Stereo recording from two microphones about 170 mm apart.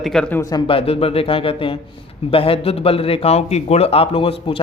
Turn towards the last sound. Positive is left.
turn(degrees=30)  # may be behind; listen again after turning